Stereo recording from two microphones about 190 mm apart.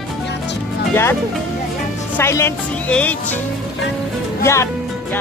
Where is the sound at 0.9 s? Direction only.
10° left (ahead or behind).